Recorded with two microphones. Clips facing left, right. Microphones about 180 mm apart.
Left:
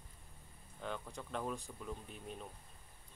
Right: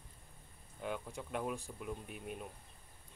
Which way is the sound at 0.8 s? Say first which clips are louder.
Right 3 dB; 10° right (ahead or behind).